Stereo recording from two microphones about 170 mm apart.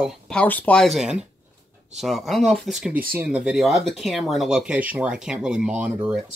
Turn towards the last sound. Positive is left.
turn(degrees=-5)  # may be behind; listen again after turning